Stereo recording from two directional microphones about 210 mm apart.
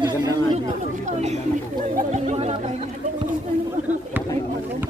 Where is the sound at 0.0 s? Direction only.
20° right (ahead or behind).